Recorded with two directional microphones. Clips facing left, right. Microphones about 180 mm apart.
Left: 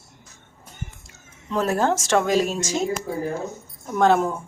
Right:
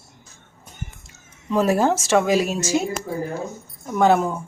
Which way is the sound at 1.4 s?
10° right (ahead or behind).